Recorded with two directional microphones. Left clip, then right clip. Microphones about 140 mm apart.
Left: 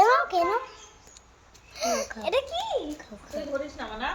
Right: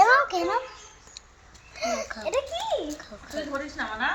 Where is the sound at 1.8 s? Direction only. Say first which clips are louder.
Left 1 dB; 60° left (ahead or behind).